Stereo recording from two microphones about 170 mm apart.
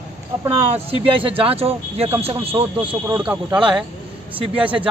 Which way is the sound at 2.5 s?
25° right (ahead or behind).